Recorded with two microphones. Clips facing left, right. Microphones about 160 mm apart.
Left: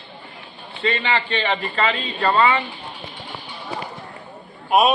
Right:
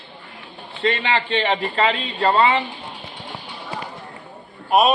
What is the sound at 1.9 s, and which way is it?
Speech, 25° right (ahead or behind).